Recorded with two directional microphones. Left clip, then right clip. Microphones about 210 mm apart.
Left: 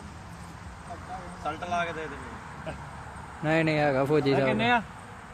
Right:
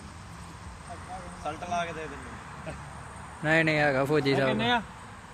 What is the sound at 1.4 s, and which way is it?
Speech, 10° right (ahead or behind).